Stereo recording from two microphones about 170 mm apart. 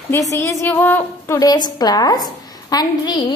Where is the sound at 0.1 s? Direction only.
15° left (ahead or behind).